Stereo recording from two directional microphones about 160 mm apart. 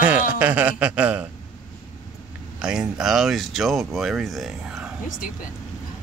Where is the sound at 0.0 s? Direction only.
10° right (ahead or behind).